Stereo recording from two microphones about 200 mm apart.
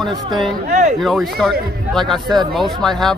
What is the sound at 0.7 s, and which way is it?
Speech, 35° right (ahead or behind).